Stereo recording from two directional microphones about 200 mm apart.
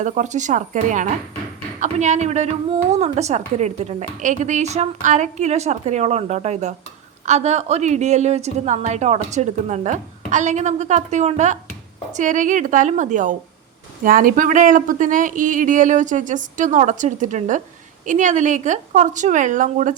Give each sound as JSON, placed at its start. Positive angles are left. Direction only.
{"t": 0.0, "sound": "a woman's voice", "side_deg": -35}